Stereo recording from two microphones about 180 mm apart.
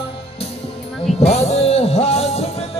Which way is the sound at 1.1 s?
35° left (ahead or behind).